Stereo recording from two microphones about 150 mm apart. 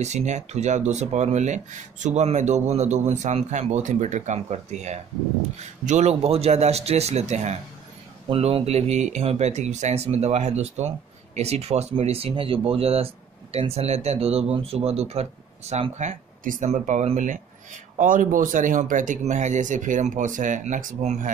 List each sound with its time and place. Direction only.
0.0 s speech: 50° right (ahead or behind)
17.9 s speech: 65° right (ahead or behind)